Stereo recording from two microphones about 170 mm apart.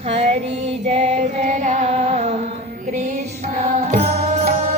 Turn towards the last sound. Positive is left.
turn(degrees=-40)  # may be behind; listen again after turning